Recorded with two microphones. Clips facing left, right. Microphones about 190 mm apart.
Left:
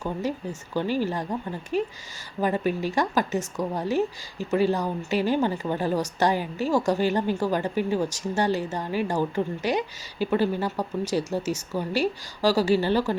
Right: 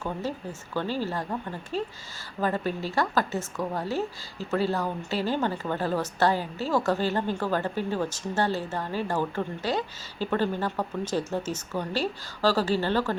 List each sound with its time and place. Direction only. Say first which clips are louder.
0.0 s speech: left 3 dB; 15° left (ahead or behind)